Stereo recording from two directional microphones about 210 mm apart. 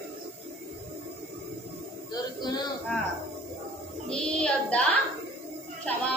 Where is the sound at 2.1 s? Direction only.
20° left (ahead or behind).